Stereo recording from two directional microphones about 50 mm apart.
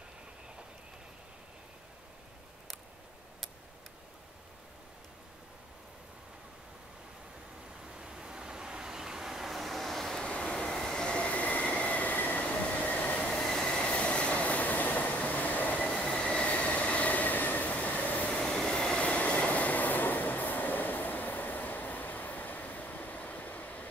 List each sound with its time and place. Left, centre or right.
8.0 s vehicle: centre
10.2 s vehicle: left
10.5 s train: centre; by 13.3 s left
13.3 s train: centre; by 16.0 s left
16.0 s train: left
18.3 s train: left